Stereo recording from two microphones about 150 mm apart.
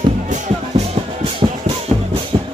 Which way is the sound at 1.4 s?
35° right (ahead or behind).